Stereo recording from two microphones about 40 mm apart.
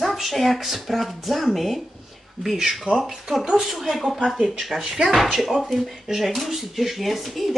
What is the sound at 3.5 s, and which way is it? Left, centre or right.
Speech, centre.